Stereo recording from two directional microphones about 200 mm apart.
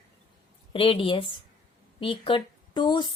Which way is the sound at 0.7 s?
25° left (ahead or behind).